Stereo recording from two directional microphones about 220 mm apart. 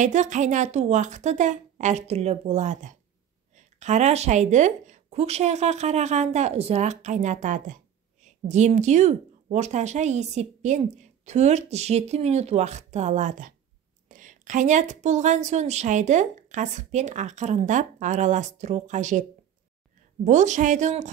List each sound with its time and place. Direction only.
0.0 s speech: 35° right (ahead or behind)
20.2 s speech: 35° right (ahead or behind)